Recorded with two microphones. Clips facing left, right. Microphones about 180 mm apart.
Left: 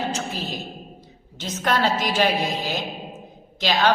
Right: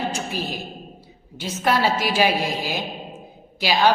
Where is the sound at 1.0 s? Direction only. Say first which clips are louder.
Right 2 dB; 10° right (ahead or behind).